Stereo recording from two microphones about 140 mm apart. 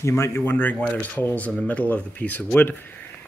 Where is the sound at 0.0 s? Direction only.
20° left (ahead or behind).